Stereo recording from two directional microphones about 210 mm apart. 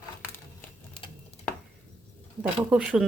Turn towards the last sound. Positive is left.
turn(degrees=-5)  # may be behind; listen again after turning